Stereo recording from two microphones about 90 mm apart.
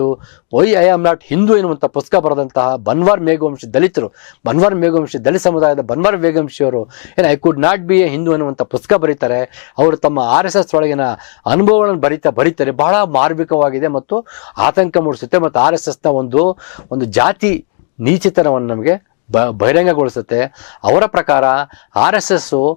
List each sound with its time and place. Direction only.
0.0 s speech: 15° left (ahead or behind)